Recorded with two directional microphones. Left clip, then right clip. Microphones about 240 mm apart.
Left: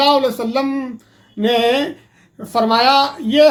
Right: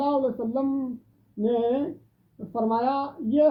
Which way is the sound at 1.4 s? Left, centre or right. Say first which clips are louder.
Left 9 dB; left.